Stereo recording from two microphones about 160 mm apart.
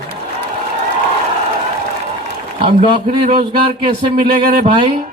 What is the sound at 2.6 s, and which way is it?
Speech, 35° right (ahead or behind).